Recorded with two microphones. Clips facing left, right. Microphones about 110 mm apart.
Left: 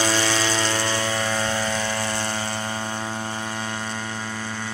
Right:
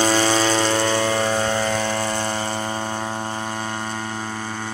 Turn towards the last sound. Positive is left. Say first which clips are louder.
# right 3 dB
turn(degrees=-25)  # may be behind; listen again after turning